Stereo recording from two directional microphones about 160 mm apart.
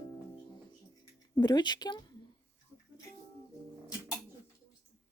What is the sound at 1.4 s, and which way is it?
Speech, 25° left (ahead or behind).